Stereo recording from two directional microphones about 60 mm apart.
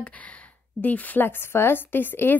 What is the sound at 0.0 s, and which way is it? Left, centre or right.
A woman's voice, left.